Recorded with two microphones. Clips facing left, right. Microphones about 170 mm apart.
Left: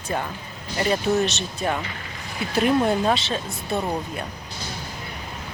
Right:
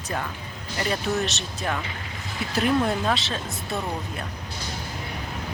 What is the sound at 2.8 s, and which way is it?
Speech, 25° left (ahead or behind).